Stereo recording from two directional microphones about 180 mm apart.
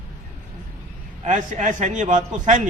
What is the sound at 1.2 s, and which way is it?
Speech, 45° right (ahead or behind).